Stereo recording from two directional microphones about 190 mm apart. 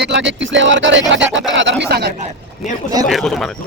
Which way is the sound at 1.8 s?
55° right (ahead or behind).